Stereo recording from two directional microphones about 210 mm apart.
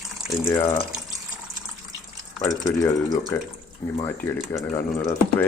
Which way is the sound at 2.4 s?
15° left (ahead or behind).